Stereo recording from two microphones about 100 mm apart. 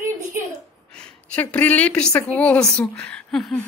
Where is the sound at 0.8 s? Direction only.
10° left (ahead or behind).